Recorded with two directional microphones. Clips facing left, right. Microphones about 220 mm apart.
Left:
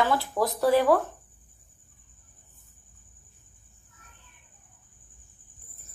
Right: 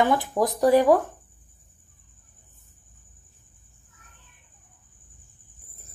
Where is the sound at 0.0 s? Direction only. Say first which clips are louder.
Right 3 dB; 15° right (ahead or behind).